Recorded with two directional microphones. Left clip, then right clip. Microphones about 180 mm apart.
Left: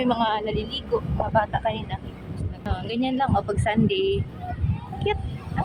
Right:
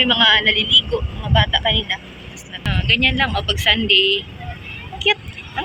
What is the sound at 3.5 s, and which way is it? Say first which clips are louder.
Speech: right 9 dB; 25° left (ahead or behind).